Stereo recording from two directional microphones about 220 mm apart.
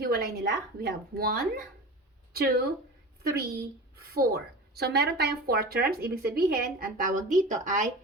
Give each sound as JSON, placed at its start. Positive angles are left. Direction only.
{"t": 0.0, "sound": "speech", "side_deg": -45}